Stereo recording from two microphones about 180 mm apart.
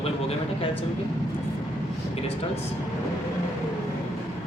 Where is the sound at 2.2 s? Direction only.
35° left (ahead or behind).